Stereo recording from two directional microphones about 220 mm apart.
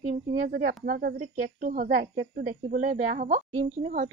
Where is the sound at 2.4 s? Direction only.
35° right (ahead or behind).